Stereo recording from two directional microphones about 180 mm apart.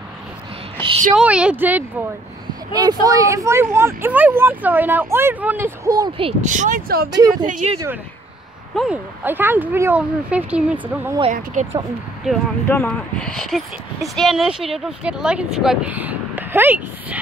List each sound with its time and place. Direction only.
1.1 s speech: 5° right (ahead or behind)
2.7 s speech: 20° right (ahead or behind)
6.5 s speech: 45° right (ahead or behind)
7.1 s speech: 20° right (ahead or behind)
7.4 s speech: 45° right (ahead or behind)
8.7 s speech: 5° right (ahead or behind)
11.6 s speech: 45° right (ahead or behind)
12.2 s speech: centre (ahead or behind)
12.6 s speech: 10° left (ahead or behind); by 17.2 s 10° right (ahead or behind)